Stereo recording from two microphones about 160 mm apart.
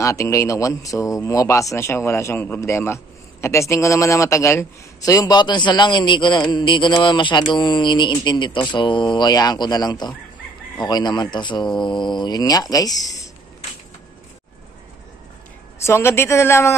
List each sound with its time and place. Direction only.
0.0 s speech: 20° left (ahead or behind)
15.8 s speech: 15° left (ahead or behind)